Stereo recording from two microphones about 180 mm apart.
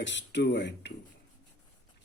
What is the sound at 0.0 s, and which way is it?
Speech, 80° left.